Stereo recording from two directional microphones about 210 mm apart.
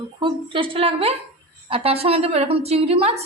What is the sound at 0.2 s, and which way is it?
A woman's voice, 25° right (ahead or behind).